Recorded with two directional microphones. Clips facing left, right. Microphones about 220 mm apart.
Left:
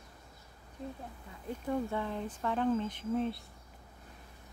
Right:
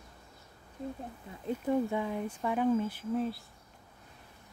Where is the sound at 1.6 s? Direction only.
10° right (ahead or behind).